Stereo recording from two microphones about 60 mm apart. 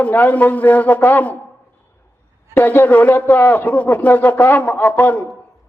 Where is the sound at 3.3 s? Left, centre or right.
Left.